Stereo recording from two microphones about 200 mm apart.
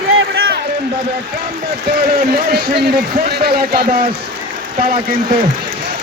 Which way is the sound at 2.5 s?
50° right (ahead or behind).